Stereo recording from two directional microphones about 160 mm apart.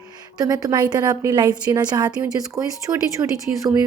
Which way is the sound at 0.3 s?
25° right (ahead or behind).